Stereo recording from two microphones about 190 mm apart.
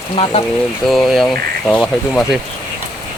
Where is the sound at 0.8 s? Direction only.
Centre (ahead or behind).